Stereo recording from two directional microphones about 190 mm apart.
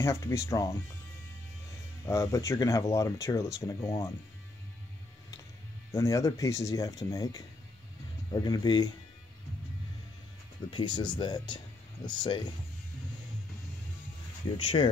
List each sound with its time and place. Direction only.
0.0 s speech: 15° left (ahead or behind)
2.0 s speech: 15° left (ahead or behind)
5.9 s speech: 15° left (ahead or behind)
10.7 s speech: 25° left (ahead or behind)